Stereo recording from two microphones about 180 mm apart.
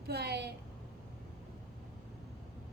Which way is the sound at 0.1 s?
65° right (ahead or behind).